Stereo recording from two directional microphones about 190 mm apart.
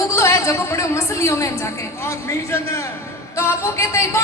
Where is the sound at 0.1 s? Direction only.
15° left (ahead or behind).